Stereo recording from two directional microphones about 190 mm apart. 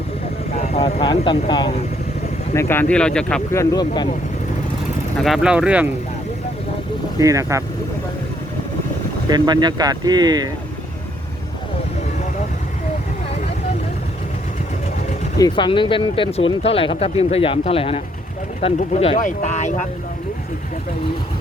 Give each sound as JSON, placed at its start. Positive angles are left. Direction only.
{"t": 0.5, "sound": "speech", "side_deg": 35}
{"t": 2.6, "sound": "speech", "side_deg": 10}
{"t": 3.5, "sound": "speech", "side_deg": 15}
{"t": 5.1, "sound": "speech", "side_deg": 0}
{"t": 7.2, "sound": "speech", "side_deg": -15}
{"t": 9.3, "sound": "speech", "side_deg": -20}
{"t": 15.4, "sound": "speech", "side_deg": 25}